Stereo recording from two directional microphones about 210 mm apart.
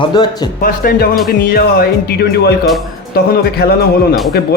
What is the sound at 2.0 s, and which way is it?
Speech, 50° left (ahead or behind).